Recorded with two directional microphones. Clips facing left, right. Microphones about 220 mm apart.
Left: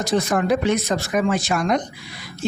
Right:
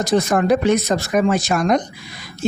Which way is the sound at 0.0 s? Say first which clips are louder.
Right 3 dB; 45° right (ahead or behind).